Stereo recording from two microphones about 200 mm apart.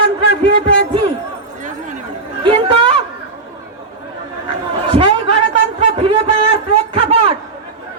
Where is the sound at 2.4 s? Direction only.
25° right (ahead or behind).